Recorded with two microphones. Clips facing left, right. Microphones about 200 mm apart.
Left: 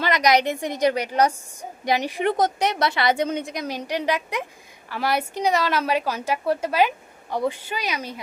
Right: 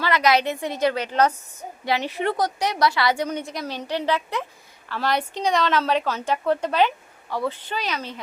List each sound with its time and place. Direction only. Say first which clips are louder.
0.0 s a woman's voice: left 1 dB; 15° left (ahead or behind)